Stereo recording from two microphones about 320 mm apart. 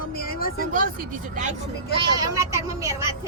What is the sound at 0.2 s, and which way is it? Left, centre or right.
Vehicle, left.